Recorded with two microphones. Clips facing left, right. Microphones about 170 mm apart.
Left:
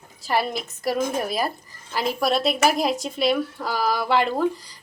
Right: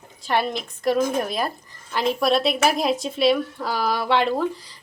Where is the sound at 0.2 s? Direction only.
5° left (ahead or behind).